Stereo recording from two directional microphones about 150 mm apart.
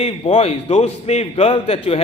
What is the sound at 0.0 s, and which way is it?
A man's voice, 40° left (ahead or behind).